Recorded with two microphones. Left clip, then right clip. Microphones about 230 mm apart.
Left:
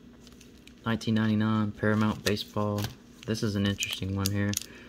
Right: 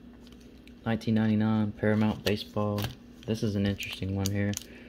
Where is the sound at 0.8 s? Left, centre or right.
Centre.